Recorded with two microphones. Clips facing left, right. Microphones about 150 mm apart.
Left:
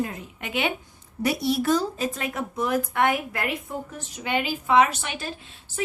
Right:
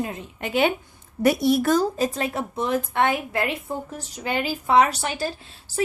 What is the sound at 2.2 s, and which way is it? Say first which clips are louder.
A woman's voice: right 2 dB; 30° right (ahead or behind).